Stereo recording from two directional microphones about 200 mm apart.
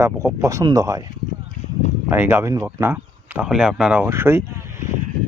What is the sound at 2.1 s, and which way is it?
Speech, 10° right (ahead or behind).